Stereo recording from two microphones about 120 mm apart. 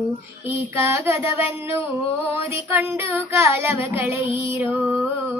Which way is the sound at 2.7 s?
20° right (ahead or behind).